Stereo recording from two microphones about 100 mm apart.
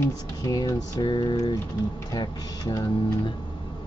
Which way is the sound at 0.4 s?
35° left (ahead or behind).